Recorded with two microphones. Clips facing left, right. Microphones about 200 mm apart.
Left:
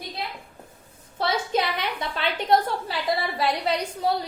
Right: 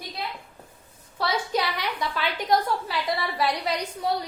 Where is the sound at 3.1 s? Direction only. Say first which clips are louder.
Left 1 dB; 30° left (ahead or behind).